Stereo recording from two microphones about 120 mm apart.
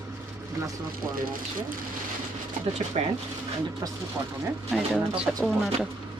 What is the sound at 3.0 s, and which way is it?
Speech, 60° right (ahead or behind).